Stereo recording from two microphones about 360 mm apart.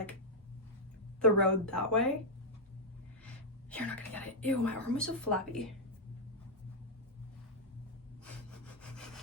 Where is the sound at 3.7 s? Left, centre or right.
Centre.